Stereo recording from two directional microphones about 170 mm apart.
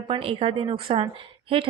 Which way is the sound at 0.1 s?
35° right (ahead or behind).